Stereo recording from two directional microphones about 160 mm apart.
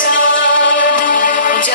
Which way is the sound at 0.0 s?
60° left (ahead or behind).